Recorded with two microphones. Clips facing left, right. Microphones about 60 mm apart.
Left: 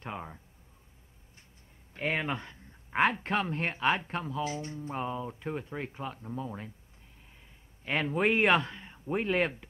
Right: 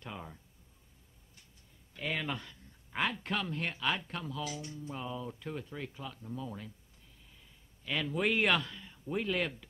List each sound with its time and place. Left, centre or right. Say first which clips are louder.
0.0 s a sound: left 5 dB; left
2.0 s speech: left 5 dB; left
7.8 s speech: left 4 dB; left